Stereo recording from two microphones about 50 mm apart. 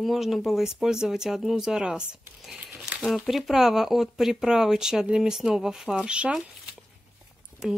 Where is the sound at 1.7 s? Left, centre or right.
Centre.